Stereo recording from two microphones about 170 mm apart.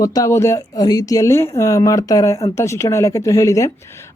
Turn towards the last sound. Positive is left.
turn(degrees=20)  # may be behind; listen again after turning